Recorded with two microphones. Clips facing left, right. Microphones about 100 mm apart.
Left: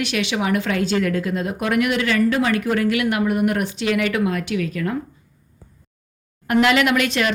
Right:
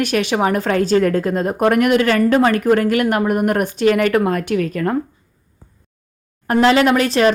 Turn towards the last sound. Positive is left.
turn(degrees=-35)  # may be behind; listen again after turning